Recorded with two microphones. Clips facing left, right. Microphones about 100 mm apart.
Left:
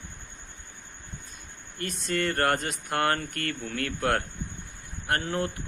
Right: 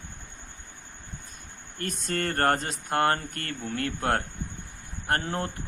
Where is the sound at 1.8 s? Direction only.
45° right (ahead or behind).